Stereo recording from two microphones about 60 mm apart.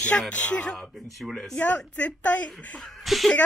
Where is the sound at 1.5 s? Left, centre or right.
Left.